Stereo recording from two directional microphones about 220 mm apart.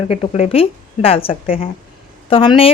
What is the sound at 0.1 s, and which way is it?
Speech, 30° left (ahead or behind).